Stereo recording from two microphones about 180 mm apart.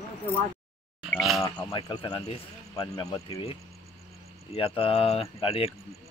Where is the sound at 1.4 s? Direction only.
25° left (ahead or behind).